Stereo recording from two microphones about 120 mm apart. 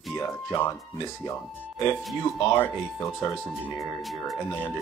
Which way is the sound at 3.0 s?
25° left (ahead or behind).